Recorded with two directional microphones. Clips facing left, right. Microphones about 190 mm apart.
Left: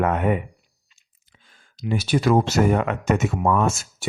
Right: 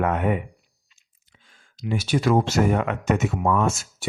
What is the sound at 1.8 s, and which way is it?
Speech, 35° left (ahead or behind).